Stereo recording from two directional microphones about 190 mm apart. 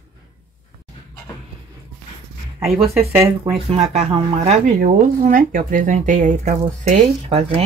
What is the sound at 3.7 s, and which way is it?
Speech, 30° right (ahead or behind).